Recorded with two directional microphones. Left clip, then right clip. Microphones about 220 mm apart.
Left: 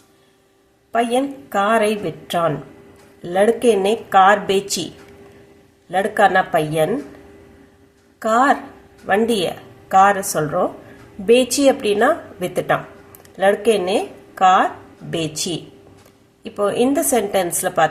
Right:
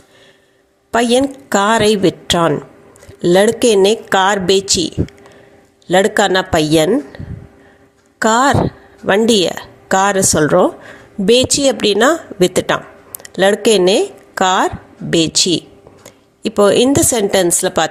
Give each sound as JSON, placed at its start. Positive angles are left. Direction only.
{"t": 0.9, "sound": "a woman's voice", "side_deg": -40}
{"t": 5.9, "sound": "speech", "side_deg": -40}
{"t": 8.2, "sound": "a woman's voice", "side_deg": -40}